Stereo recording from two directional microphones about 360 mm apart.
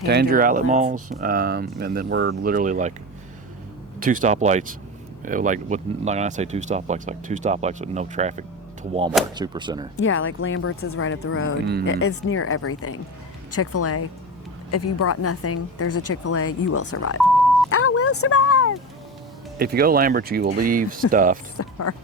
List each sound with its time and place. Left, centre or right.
0.0 s speech: right
4.0 s speech: right
10.0 s a woman's voice: left
11.6 s speech: right
11.9 s a woman's voice: left
19.5 s speech: right
21.6 s speech: left